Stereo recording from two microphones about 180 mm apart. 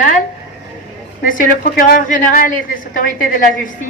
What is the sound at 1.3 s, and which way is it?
A woman's voice, 50° left (ahead or behind).